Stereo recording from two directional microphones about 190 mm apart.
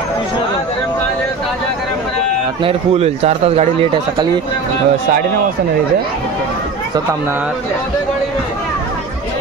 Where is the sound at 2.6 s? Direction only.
30° right (ahead or behind).